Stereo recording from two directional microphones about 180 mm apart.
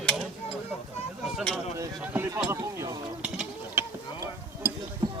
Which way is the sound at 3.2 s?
5° right (ahead or behind).